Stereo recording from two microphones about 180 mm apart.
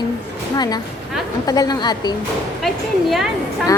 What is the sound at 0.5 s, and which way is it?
A woman's voice, 20° left (ahead or behind).